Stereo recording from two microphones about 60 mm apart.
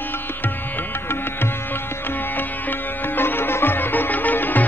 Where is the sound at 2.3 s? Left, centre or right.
Left.